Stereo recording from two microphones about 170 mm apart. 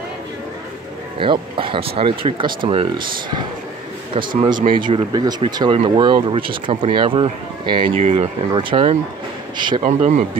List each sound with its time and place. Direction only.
1.2 s speech: 30° right (ahead or behind)
9.8 s speech: 45° right (ahead or behind)